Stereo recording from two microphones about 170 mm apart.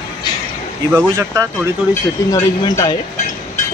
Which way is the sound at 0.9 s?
20° right (ahead or behind).